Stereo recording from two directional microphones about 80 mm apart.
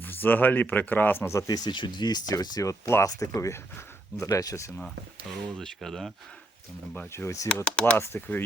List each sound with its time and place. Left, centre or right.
0.0 s speech: left
1.5 s speech: left
2.6 s speech: left
5.5 s speech: centre
7.1 s speech: left
7.4 s speech: centre
7.9 s speech: left